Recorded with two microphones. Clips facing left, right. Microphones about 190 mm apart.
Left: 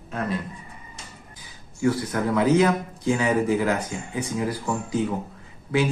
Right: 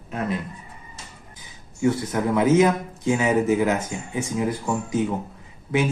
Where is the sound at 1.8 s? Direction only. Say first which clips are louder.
Right 1 dB; 20° right (ahead or behind).